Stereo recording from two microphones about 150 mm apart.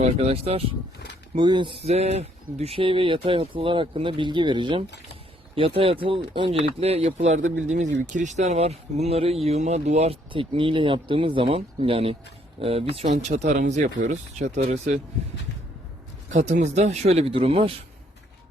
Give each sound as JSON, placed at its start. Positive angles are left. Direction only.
{"t": 0.0, "sound": "speech", "side_deg": -45}
{"t": 1.4, "sound": "speech", "side_deg": -30}
{"t": 7.3, "sound": "speech", "side_deg": -55}
{"t": 16.3, "sound": "speech", "side_deg": -55}